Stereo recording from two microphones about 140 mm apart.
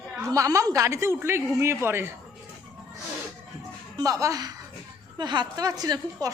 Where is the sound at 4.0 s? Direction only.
25° right (ahead or behind).